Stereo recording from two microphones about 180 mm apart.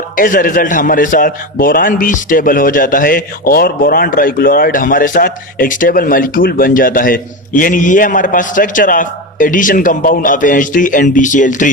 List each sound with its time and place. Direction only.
0.2 s a man's voice: 50° left (ahead or behind)